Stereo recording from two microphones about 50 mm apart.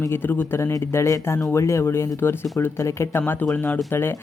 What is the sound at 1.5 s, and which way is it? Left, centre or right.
Speech, left.